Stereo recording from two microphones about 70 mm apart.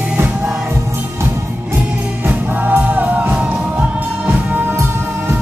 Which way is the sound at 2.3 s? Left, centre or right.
Right.